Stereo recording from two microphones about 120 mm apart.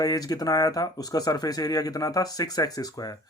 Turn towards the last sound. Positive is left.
turn(degrees=30)  # may be behind; listen again after turning